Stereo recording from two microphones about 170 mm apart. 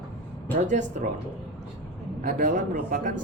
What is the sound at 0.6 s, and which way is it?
Speech, 45° right (ahead or behind).